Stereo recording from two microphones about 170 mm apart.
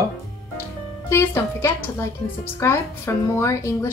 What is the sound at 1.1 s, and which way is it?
A woman's voice, 15° left (ahead or behind).